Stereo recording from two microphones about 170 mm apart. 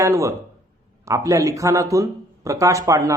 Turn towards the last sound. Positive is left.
turn(degrees=-20)  # may be behind; listen again after turning